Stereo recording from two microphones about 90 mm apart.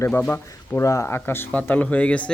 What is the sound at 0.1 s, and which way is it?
Speech, 15° left (ahead or behind).